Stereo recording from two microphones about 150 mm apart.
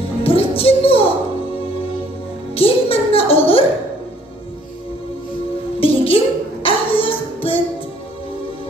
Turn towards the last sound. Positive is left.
turn(degrees=35)  # may be behind; listen again after turning